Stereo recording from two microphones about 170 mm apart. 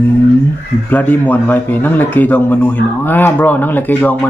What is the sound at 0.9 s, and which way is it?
Speech, 10° left (ahead or behind).